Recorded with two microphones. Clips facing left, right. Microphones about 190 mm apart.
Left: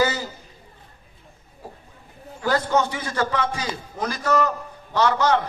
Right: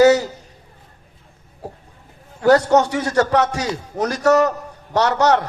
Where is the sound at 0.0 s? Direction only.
70° right (ahead or behind).